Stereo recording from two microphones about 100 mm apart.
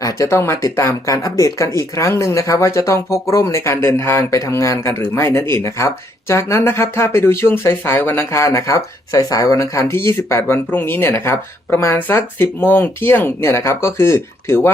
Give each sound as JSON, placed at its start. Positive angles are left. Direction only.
{"t": 0.0, "sound": "speech", "side_deg": 30}